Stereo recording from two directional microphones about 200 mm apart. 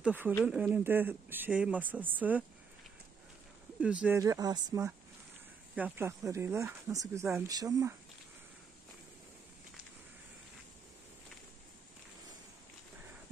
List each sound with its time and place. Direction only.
0.0 s speech: 10° right (ahead or behind)
3.8 s speech: 5° right (ahead or behind)
4.2 s speech: 20° right (ahead or behind)